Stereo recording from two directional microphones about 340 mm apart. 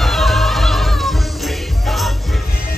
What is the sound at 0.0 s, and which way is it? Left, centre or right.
Music, centre.